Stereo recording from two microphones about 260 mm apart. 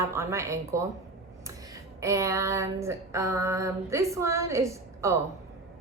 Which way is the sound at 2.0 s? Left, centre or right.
Centre.